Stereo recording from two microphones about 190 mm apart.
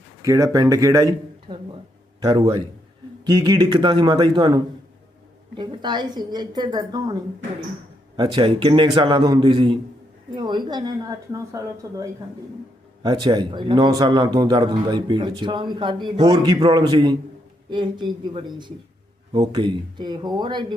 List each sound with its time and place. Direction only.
0.2 s a man's voice: 15° right (ahead or behind)